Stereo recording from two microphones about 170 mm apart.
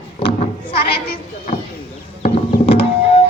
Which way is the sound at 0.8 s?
70° left (ahead or behind).